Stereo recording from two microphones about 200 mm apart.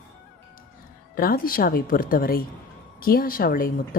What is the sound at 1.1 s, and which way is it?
A woman's voice, 45° left (ahead or behind).